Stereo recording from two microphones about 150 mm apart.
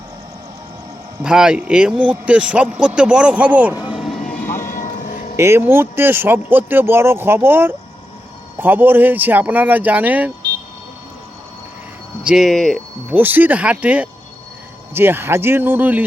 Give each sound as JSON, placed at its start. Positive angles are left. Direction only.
{"t": 1.2, "sound": "a man's voice", "side_deg": -5}
{"t": 4.3, "sound": "vehicle", "side_deg": 15}
{"t": 4.7, "sound": "vehicle", "side_deg": 65}
{"t": 5.4, "sound": "a man's voice", "side_deg": -15}
{"t": 12.2, "sound": "speech", "side_deg": -5}
{"t": 13.1, "sound": "a man's voice", "side_deg": -10}